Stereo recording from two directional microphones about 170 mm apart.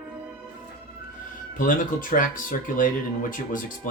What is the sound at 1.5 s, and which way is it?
Speech, 50° left (ahead or behind).